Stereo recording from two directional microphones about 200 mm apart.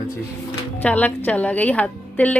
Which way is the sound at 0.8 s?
10° left (ahead or behind).